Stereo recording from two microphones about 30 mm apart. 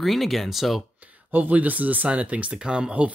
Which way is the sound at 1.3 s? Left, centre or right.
Right.